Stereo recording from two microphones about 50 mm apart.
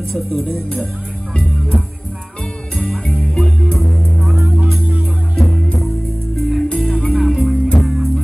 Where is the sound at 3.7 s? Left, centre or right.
Centre.